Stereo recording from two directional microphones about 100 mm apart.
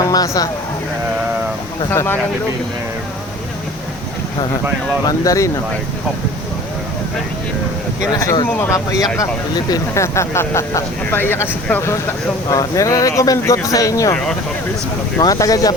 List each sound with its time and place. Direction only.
0.0 s a sound: 40° left (ahead or behind)
1.9 s speech: 25° left (ahead or behind)
5.0 s speech: 35° left (ahead or behind)
8.1 s speech: 35° left (ahead or behind)
15.2 s speech: 35° left (ahead or behind)